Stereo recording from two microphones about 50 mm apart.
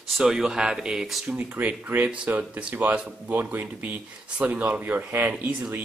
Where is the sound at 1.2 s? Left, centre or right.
Right.